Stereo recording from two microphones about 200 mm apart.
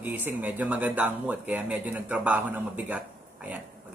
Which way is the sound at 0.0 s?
10° right (ahead or behind).